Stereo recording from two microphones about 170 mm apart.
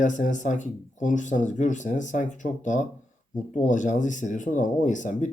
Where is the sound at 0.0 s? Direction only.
45° left (ahead or behind).